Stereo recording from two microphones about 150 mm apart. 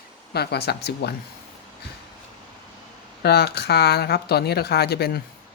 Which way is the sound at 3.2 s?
90° left.